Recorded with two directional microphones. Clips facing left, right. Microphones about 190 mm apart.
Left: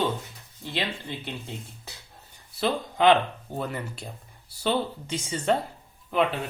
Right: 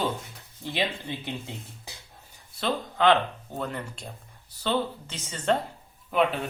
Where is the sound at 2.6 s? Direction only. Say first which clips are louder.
Left 2 dB; 15° left (ahead or behind).